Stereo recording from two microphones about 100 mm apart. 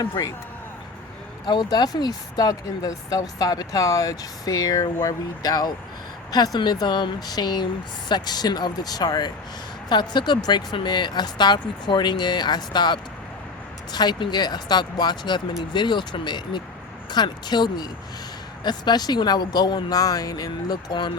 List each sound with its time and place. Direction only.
0.0 s speech: 40° left (ahead or behind)
1.5 s speech: 45° left (ahead or behind)